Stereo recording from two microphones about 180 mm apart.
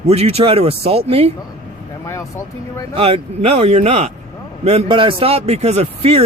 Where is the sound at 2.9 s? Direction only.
30° right (ahead or behind).